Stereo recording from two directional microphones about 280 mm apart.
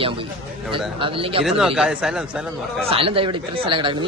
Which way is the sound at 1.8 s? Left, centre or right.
Centre.